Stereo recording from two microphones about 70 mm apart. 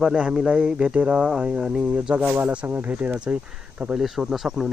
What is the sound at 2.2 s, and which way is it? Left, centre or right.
Speech, right.